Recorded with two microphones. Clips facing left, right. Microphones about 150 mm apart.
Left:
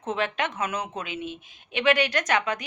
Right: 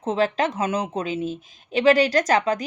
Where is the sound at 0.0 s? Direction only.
35° right (ahead or behind).